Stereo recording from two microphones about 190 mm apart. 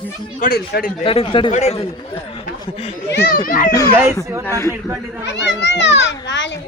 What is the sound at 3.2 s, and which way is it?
Speech, 50° left (ahead or behind).